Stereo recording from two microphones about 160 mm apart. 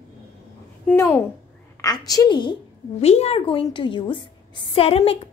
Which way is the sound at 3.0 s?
40° left (ahead or behind).